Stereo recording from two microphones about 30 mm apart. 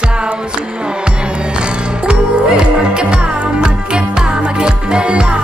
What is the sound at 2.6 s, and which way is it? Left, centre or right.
Music, right.